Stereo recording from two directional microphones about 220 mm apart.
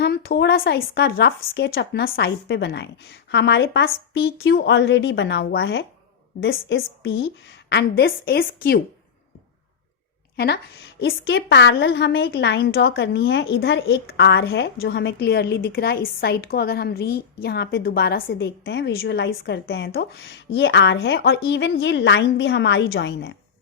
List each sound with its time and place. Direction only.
0.0 s a woman's voice: 45° left (ahead or behind)
10.3 s a woman's voice: 45° left (ahead or behind)